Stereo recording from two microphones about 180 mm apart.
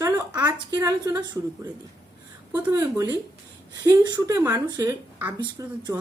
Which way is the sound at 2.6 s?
20° right (ahead or behind).